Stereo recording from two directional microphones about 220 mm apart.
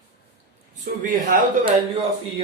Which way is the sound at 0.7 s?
35° right (ahead or behind).